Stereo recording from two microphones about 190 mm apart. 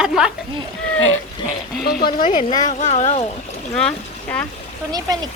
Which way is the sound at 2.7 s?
40° left (ahead or behind).